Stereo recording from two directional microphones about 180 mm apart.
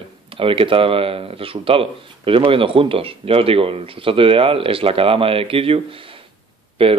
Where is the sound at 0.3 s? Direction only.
30° right (ahead or behind).